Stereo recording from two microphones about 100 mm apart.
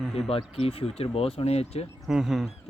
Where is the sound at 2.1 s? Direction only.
5° right (ahead or behind).